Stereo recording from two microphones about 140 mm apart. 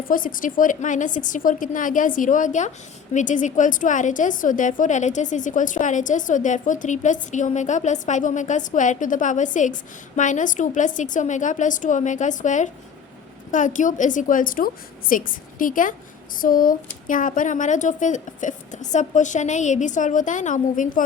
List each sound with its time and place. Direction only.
0.1 s a woman's voice: 80° left
16.4 s a woman's voice: 85° left; by 21.0 s 70° left (ahead or behind)